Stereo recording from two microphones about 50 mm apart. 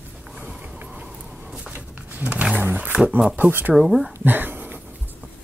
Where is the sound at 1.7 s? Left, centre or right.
Right.